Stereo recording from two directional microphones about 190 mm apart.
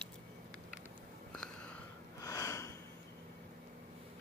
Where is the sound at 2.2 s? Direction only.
15° left (ahead or behind).